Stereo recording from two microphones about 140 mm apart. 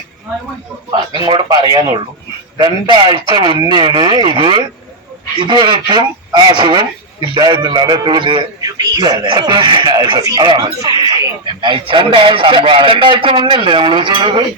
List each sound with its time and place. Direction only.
0.9 s a man's voice: 30° right (ahead or behind)